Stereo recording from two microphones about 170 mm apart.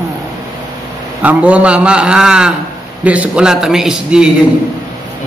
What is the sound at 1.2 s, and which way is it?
A man's voice, 10° right (ahead or behind).